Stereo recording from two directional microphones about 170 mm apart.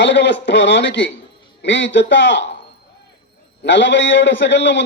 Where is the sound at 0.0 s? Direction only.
90° left.